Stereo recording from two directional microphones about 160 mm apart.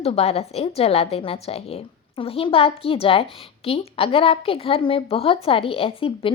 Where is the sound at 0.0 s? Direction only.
40° left (ahead or behind).